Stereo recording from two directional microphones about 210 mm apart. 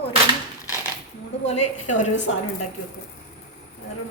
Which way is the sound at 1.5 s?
30° left (ahead or behind).